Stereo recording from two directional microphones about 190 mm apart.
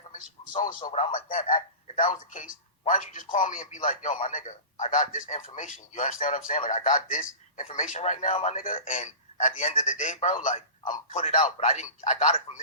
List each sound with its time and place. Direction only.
0.1 s a man's voice: 45° left (ahead or behind)